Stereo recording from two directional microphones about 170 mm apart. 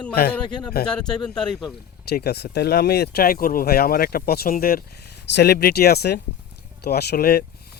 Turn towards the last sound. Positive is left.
turn(degrees=65)  # may be behind; listen again after turning